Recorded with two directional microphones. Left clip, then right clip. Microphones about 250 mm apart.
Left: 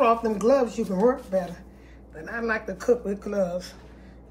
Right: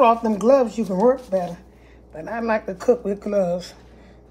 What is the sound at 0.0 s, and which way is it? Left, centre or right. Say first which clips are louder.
Speech: right 5 dB; right.